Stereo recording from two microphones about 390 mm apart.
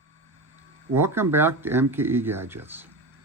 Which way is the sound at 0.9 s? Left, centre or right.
Centre.